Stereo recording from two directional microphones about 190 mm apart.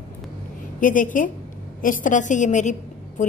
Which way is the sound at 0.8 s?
45° left (ahead or behind).